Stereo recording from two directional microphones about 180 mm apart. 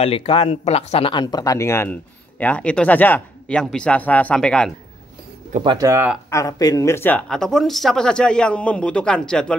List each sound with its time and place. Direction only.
0.0 s speech: 30° left (ahead or behind); by 4.7 s 5° left (ahead or behind)
5.6 s speech: 25° right (ahead or behind)
5.9 s speech: 10° right (ahead or behind)
6.3 s speech: 20° left (ahead or behind)